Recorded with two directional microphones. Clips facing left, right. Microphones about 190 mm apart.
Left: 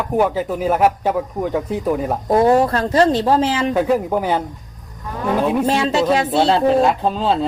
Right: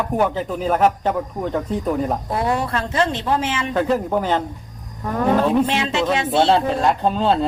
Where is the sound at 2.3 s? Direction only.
40° left (ahead or behind).